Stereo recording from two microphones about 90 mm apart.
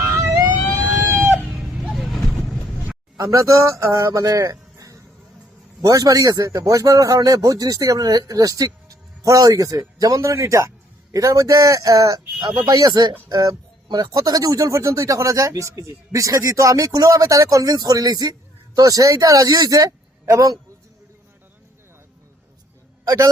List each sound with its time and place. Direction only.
0.0 s emergency vehicle: 35° right (ahead or behind)
0.6 s vehicle: 15° left (ahead or behind)
0.9 s a sound: 25° right (ahead or behind)
1.5 s vehicle: 5° right (ahead or behind)
3.2 s speech: 35° right (ahead or behind)
23.0 s speech: 40° right (ahead or behind)